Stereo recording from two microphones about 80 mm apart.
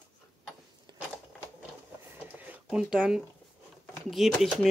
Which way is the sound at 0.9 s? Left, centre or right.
Right.